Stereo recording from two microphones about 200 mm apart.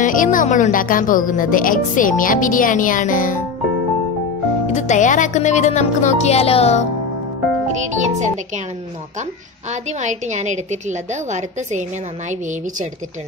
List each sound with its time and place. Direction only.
0.0 s speech: 40° left (ahead or behind)
4.7 s speech: 35° left (ahead or behind)
7.7 s a woman's voice: 35° right (ahead or behind)
9.7 s a woman's voice: 35° right (ahead or behind)